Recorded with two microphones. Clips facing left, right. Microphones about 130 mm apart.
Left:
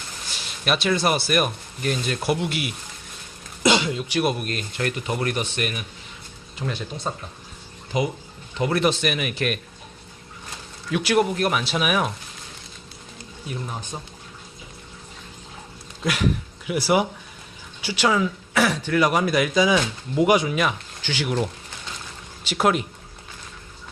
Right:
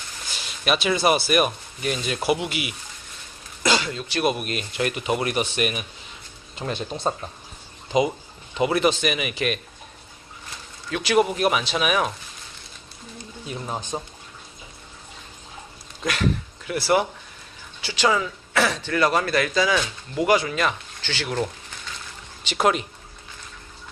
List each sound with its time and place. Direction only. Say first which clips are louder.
0.6 s speech: right 1 dB; centre (ahead or behind)
3.6 s speech: left 3 dB; 20° left (ahead or behind)
4.4 s speech: right 1 dB; 10° right (ahead or behind)
8.7 s speech: left 1 dB; centre (ahead or behind)
10.9 s speech: even; centre (ahead or behind)
11.3 s speech: right 1 dB; 10° right (ahead or behind)
11.6 s speech: even; 5° left (ahead or behind)
13.5 s speech: right 3 dB; 25° right (ahead or behind)
16.6 s speech: left 1 dB; 10° left (ahead or behind)